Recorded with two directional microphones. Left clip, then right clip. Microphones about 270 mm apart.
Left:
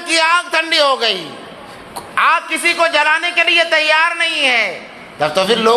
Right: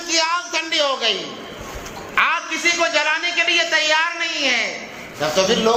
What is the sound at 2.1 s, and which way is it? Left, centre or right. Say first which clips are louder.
A man's voice: left 5 dB; left.